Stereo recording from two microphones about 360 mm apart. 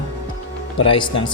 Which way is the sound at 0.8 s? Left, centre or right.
Centre.